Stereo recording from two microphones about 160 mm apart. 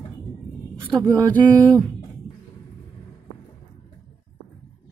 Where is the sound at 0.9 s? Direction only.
20° right (ahead or behind).